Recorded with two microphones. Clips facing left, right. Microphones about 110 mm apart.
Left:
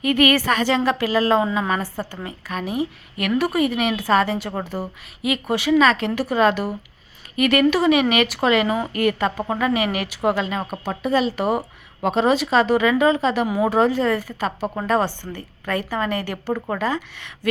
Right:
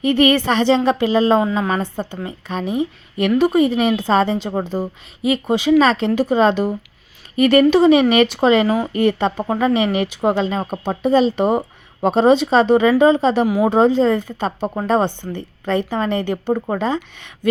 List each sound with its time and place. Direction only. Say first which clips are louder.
0.0 s speech: right 3 dB; 30° right (ahead or behind)
7.3 s speech: right 5 dB; 35° right (ahead or behind)
8.6 s speech: right 4 dB; centre (ahead or behind)
8.9 s speech: right 4 dB; 25° right (ahead or behind)